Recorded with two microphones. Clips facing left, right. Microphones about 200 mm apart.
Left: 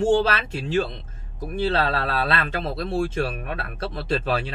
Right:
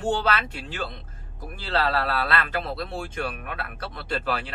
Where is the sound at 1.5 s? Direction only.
20° left (ahead or behind).